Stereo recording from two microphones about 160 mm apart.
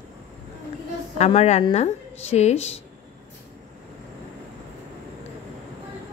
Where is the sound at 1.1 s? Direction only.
45° left (ahead or behind).